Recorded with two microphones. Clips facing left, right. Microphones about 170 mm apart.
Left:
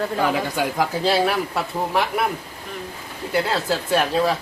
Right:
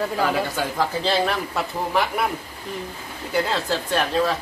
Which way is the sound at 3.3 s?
5° left (ahead or behind).